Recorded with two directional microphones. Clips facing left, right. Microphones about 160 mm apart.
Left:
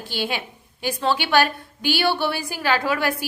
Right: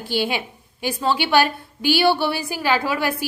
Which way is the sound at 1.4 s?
50° left (ahead or behind).